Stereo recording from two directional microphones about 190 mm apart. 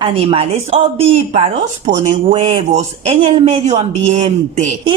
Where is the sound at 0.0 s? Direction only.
30° right (ahead or behind).